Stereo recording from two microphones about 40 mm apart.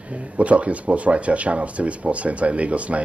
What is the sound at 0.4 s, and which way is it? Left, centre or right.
Speech, right.